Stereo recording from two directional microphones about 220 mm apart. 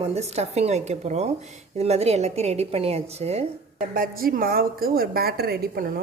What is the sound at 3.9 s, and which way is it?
A woman's voice, 40° right (ahead or behind).